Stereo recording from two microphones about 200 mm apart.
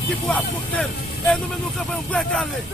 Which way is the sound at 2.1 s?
5° left (ahead or behind).